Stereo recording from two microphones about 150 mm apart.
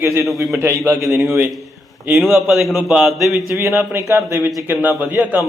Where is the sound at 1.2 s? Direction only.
5° right (ahead or behind).